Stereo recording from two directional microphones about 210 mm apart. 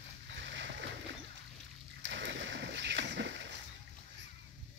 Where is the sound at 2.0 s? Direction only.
60° right (ahead or behind).